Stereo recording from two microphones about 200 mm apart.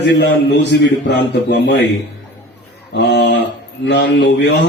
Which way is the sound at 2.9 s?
60° left (ahead or behind).